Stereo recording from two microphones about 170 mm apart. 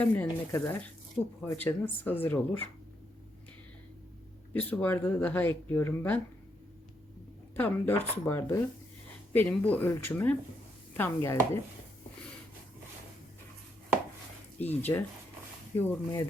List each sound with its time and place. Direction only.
0.0 s speech: 10° left (ahead or behind)
4.5 s speech: 10° left (ahead or behind)
7.5 s speech: 10° left (ahead or behind)
14.6 s speech: 10° left (ahead or behind)